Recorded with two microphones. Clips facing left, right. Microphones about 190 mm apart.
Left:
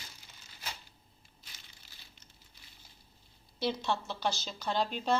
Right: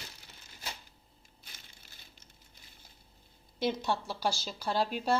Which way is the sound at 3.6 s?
15° right (ahead or behind).